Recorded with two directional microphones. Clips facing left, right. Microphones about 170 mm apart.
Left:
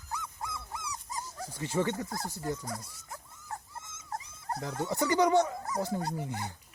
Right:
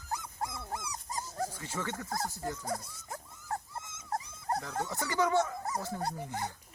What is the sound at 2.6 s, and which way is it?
Speech, 35° right (ahead or behind).